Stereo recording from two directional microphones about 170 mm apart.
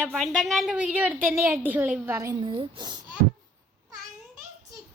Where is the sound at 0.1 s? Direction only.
Centre (ahead or behind); by 3.0 s 25° right (ahead or behind).